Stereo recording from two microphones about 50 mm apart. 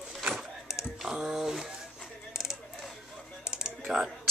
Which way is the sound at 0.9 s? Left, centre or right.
Centre.